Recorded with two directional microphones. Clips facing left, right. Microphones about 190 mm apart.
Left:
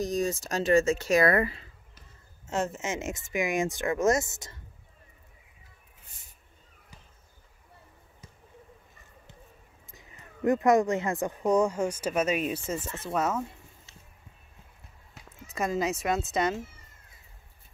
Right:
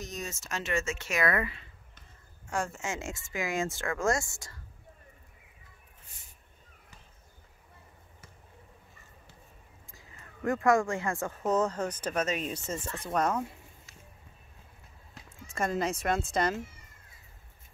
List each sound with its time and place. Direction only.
0.0 s speech: 35° left (ahead or behind)
2.4 s speech: 20° left (ahead or behind)
9.8 s speech: 20° left (ahead or behind)
15.5 s speech: 5° left (ahead or behind)